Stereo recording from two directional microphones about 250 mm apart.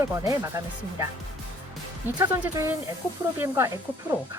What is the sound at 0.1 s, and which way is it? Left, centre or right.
Speech, centre.